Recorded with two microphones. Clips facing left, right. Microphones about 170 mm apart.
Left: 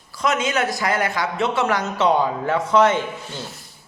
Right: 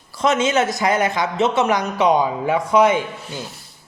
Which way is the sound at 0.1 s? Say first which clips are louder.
Right 4 dB; 25° right (ahead or behind).